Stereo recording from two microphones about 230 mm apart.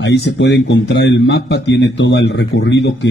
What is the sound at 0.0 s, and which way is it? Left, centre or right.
A man's voice, left.